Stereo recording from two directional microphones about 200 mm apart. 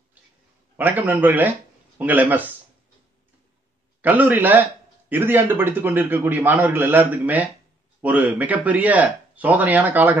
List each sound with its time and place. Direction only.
0.7 s a man's voice: 10° right (ahead or behind)
4.0 s a man's voice: 10° right (ahead or behind)